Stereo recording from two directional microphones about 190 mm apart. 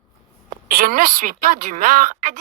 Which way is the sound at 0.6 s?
50° right (ahead or behind).